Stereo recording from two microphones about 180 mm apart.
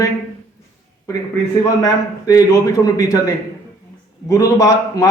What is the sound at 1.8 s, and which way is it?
A man's voice, 20° left (ahead or behind).